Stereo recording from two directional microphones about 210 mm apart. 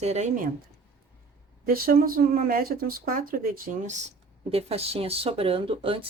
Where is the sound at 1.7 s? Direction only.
45° right (ahead or behind).